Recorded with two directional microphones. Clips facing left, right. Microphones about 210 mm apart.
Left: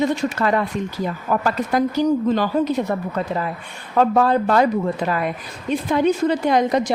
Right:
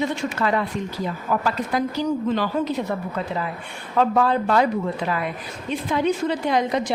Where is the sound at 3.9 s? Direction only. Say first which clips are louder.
Left 3 dB; 40° left (ahead or behind).